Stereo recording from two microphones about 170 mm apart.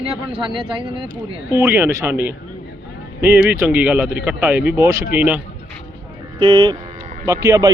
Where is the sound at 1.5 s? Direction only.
15° right (ahead or behind).